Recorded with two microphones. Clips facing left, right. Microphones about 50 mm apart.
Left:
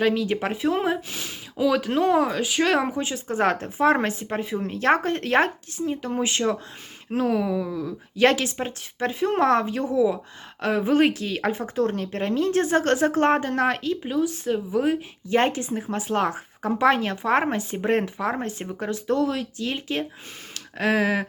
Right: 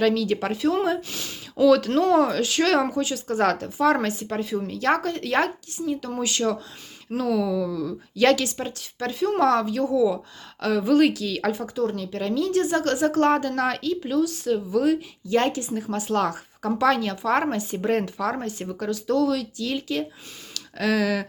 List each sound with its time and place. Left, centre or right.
0.0 s speech: left